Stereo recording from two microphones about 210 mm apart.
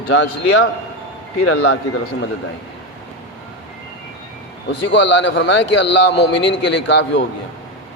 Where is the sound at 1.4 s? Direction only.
90° left.